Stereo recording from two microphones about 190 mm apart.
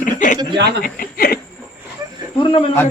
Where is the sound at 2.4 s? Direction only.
25° left (ahead or behind).